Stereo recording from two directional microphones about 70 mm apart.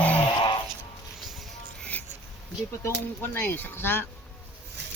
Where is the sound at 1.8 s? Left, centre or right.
Left.